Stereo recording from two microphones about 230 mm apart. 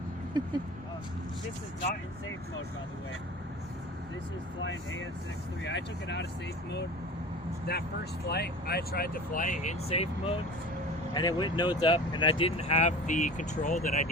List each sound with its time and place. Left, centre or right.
4.6 s speech: left
7.7 s speech: left